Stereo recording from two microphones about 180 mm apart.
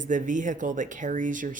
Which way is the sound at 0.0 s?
45° right (ahead or behind).